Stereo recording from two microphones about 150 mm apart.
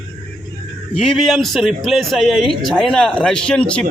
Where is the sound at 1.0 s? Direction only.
Centre (ahead or behind).